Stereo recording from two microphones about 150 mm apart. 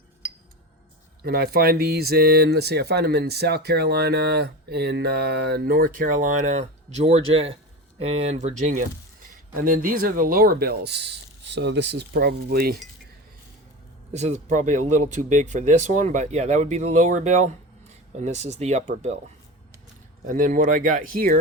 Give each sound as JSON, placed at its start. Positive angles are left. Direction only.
{"t": 1.2, "sound": "speech", "side_deg": -90}
{"t": 9.6, "sound": "speech", "side_deg": -70}
{"t": 14.1, "sound": "speech", "side_deg": -50}
{"t": 20.2, "sound": "speech", "side_deg": -65}